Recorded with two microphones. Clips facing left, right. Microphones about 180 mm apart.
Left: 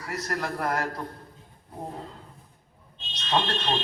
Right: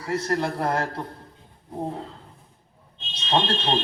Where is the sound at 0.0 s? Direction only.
30° right (ahead or behind).